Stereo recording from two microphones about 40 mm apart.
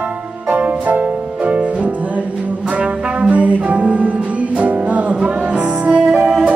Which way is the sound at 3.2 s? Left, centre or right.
Right.